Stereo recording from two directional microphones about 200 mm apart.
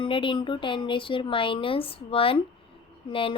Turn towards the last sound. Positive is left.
turn(degrees=25)  # may be behind; listen again after turning